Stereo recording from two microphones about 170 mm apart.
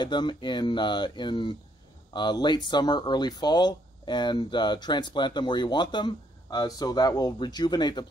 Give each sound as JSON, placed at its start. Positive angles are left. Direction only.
{"t": 0.0, "sound": "speech", "side_deg": 25}